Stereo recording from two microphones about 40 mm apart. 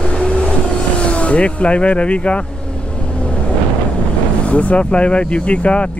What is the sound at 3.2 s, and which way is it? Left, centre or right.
Vehicle, left.